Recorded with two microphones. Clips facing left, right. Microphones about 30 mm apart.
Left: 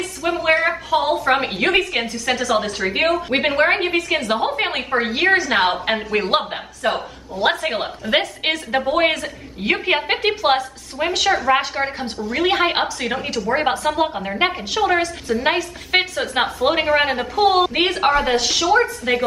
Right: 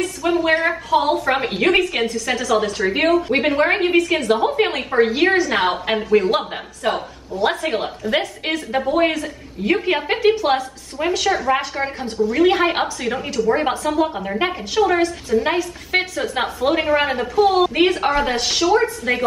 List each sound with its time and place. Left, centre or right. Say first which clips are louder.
0.2 s a woman's voice: even; centre
6.1 s speech: right 4 dB; left
6.8 s a woman's voice: even; centre
8.4 s a woman's voice: left 1 dB; left
9.8 s a woman's voice: right 2 dB; left
15.4 s a woman's voice: left 1 dB; left
18.1 s a woman's voice: left 2 dB; centre